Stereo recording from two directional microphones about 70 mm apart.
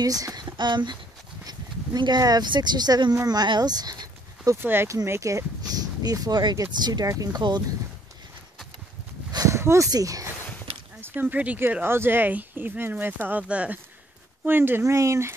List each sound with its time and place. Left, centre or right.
0.0 s speech: right
4.6 s speech: right
5.0 s speech: right
5.6 s speech: right
9.5 s a sound: right
9.8 s speech: right
11.0 s a woman's voice: right
14.4 s a woman's voice: right
14.9 s speech: right